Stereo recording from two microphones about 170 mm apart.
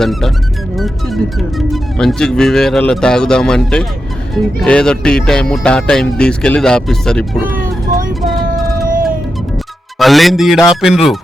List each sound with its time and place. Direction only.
0.0 s speech: centre (ahead or behind)
7.6 s vehicle: 55° right (ahead or behind)
8.2 s a sound: centre (ahead or behind)
8.6 s cat: 55° right (ahead or behind)
10.0 s speech: centre (ahead or behind)